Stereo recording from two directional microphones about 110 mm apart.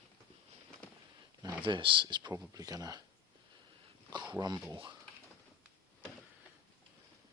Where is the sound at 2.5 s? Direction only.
30° right (ahead or behind).